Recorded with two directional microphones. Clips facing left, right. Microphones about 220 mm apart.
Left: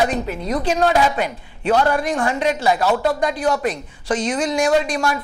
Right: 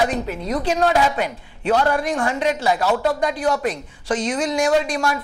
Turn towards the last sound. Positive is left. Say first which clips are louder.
# left 1 dB
turn(degrees=15)  # may be behind; listen again after turning